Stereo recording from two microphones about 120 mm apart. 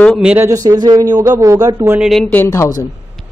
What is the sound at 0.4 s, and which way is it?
Speech, 30° right (ahead or behind).